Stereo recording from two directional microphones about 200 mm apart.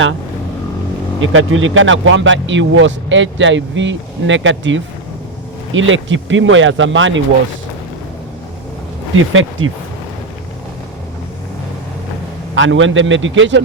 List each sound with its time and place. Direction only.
1.2 s speech: 85° right
9.1 s speech: 80° right
12.5 s speech: 75° right (ahead or behind)